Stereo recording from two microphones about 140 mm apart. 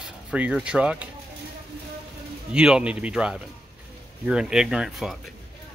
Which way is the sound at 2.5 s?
5° right (ahead or behind).